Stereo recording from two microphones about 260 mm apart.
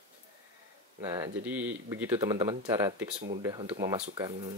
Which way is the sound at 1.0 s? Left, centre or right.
Centre.